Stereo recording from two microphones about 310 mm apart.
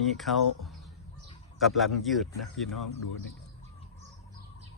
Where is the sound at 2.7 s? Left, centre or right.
Left.